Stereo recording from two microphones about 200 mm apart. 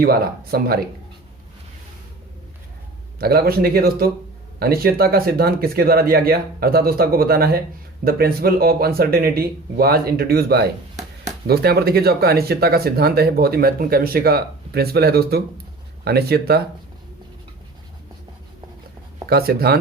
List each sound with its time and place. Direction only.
0.0 s speech: 50° right (ahead or behind)
3.2 s speech: 50° right (ahead or behind)
19.3 s speech: 50° right (ahead or behind)